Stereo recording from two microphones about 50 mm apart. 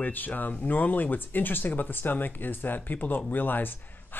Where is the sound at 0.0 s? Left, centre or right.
Left.